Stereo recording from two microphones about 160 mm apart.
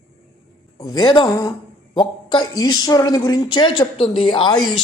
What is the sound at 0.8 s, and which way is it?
A woman's voice, 25° left (ahead or behind).